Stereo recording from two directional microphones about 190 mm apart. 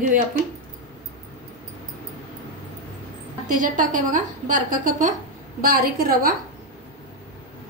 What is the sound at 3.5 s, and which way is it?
A woman's voice, 45° right (ahead or behind).